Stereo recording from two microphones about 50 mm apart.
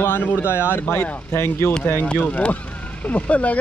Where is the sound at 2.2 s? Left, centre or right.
Left.